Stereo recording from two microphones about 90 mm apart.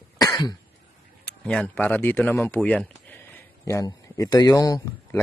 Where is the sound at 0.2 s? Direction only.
50° left (ahead or behind).